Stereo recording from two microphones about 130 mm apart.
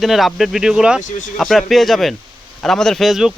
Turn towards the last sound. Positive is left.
turn(degrees=-5)  # may be behind; listen again after turning